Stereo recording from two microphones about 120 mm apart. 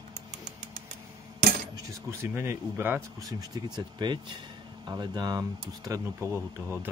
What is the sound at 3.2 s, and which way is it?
Speech, 35° right (ahead or behind).